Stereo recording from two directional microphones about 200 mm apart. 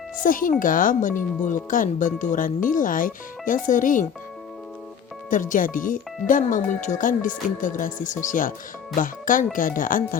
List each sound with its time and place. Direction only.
0.2 s speech: 40° left (ahead or behind)
5.3 s speech: 40° left (ahead or behind)